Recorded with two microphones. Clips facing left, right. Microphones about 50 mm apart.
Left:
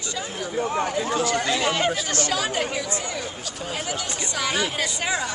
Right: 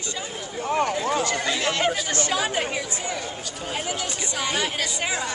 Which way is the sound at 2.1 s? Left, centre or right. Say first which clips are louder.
Even; right.